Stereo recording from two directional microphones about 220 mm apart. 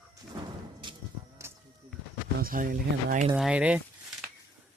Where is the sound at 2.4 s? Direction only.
40° right (ahead or behind).